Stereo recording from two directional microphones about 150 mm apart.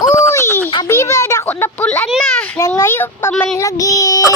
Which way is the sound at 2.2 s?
15° left (ahead or behind).